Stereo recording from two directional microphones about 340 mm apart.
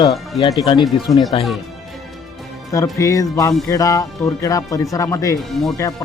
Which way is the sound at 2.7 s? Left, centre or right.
Centre.